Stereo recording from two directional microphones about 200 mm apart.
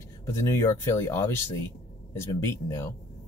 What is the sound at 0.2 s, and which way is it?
Speech, 15° left (ahead or behind).